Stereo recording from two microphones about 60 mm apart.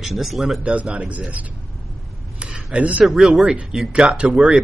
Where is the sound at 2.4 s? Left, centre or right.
Centre.